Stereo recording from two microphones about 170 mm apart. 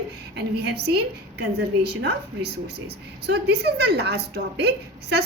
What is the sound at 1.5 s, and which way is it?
A woman's voice, 75° right (ahead or behind).